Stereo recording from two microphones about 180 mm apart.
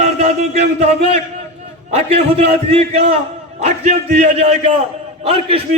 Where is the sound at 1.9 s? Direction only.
35° right (ahead or behind).